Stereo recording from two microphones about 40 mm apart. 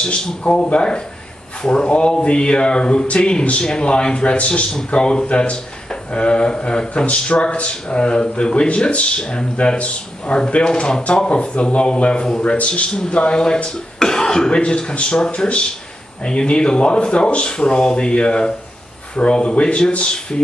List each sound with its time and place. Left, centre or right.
0.0 s a man's voice: left
11.2 s a man's voice: left